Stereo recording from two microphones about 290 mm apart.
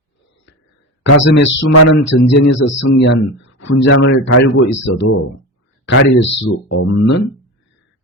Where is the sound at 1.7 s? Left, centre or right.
Left.